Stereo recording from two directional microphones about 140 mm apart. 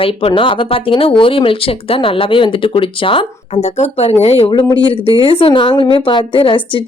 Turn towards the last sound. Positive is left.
turn(degrees=40)  # may be behind; listen again after turning